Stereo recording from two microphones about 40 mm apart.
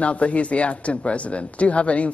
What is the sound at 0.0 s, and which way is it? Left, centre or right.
Speech, left.